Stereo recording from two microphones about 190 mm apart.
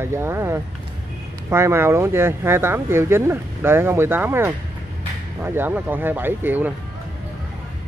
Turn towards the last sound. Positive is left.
turn(degrees=-10)  # may be behind; listen again after turning